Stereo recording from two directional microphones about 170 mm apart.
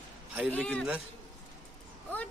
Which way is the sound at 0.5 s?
5° left (ahead or behind).